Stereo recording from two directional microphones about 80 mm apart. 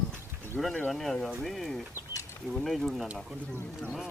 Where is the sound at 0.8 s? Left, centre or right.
Centre.